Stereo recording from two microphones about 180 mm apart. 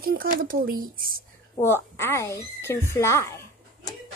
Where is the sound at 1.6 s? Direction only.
15° left (ahead or behind).